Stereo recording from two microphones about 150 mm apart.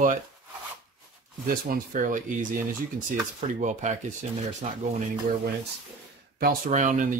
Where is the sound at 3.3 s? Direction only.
55° right (ahead or behind).